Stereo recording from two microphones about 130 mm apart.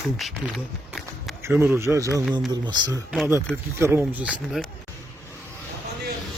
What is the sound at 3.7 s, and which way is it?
Speech, 20° right (ahead or behind).